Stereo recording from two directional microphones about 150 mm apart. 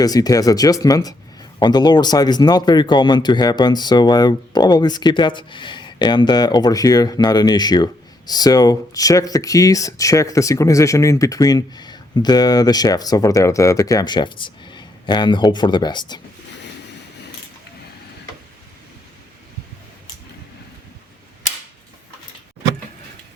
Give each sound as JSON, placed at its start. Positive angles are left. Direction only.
{"t": 0.0, "sound": "speech", "side_deg": 25}